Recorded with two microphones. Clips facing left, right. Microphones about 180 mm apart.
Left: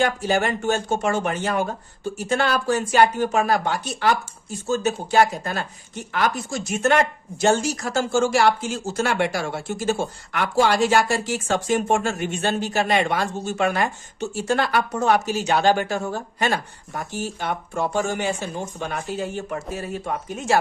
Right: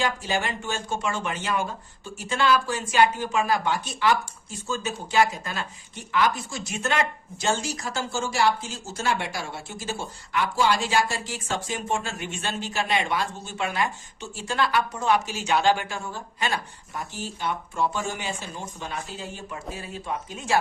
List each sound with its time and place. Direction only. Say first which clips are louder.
0.0 s speech: left 6 dB; 55° left (ahead or behind)
8.2 s speech: left 3 dB; 70° left (ahead or behind)
13.5 s speech: left 6 dB; 50° left (ahead or behind)